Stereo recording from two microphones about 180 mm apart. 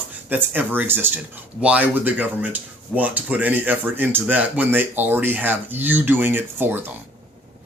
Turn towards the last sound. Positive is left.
turn(degrees=-10)  # may be behind; listen again after turning